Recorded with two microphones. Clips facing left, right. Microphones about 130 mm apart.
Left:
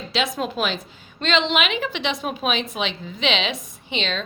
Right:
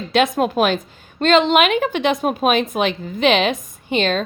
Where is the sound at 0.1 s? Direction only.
50° right (ahead or behind).